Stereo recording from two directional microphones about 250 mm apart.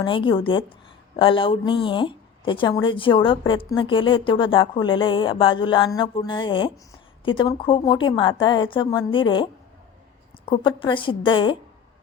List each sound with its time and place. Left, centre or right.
0.0 s speech: centre